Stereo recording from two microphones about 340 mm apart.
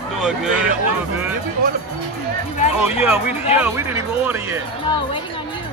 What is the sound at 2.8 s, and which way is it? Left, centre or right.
Speech, centre.